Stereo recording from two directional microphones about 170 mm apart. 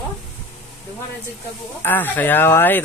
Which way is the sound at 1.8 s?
10° left (ahead or behind).